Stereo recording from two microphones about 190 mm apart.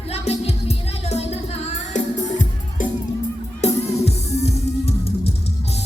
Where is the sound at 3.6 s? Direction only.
35° left (ahead or behind).